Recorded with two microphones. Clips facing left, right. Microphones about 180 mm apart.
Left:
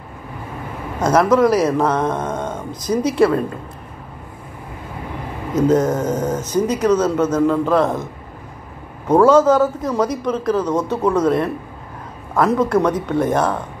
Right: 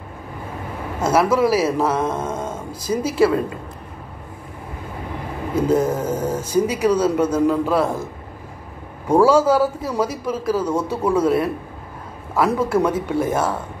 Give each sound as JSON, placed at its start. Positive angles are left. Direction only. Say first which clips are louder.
{"t": 1.0, "sound": "a man's voice", "louder": "left 3 dB", "side_deg": -5}
{"t": 5.7, "sound": "a man's voice", "louder": "left 2 dB", "side_deg": -10}